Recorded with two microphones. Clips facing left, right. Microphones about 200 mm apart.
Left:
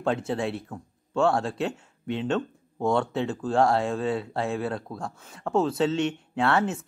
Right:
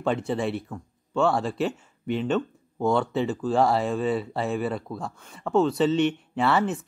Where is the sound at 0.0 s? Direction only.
Centre (ahead or behind).